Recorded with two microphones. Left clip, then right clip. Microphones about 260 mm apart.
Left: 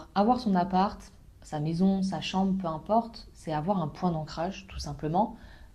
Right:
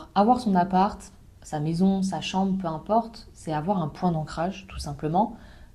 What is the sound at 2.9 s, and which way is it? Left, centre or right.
Speech, left.